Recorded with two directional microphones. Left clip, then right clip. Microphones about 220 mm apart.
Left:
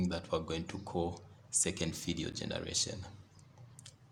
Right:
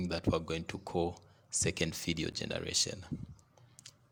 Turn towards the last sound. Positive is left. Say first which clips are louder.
# right 3 dB
turn(degrees=-30)  # may be behind; listen again after turning